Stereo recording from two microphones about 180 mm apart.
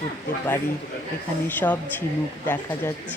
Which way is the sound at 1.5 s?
10° left (ahead or behind).